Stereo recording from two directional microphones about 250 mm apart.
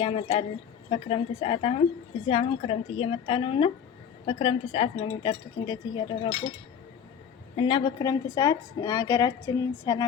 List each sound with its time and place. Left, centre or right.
0.0 s speech: left
7.5 s a woman's voice: centre